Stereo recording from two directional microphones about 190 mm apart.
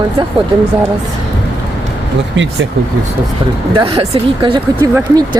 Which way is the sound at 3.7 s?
30° right (ahead or behind).